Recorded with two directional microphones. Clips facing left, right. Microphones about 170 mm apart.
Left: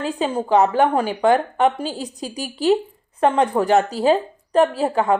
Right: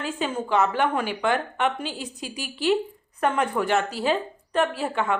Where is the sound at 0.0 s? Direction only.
35° left (ahead or behind).